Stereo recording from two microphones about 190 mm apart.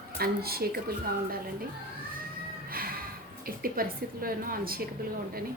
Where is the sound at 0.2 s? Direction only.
55° right (ahead or behind).